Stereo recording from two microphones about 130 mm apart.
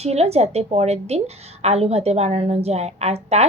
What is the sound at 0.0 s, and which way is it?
A woman's voice, 55° right (ahead or behind).